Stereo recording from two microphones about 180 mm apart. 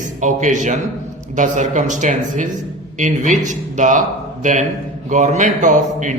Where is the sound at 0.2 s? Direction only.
45° right (ahead or behind).